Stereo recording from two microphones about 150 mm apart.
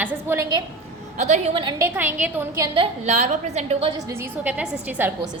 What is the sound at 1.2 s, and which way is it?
Speech, 50° right (ahead or behind).